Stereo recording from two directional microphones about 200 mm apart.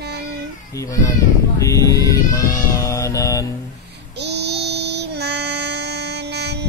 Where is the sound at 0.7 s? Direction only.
15° left (ahead or behind).